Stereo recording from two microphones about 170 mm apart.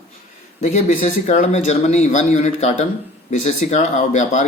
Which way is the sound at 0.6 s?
45° left (ahead or behind).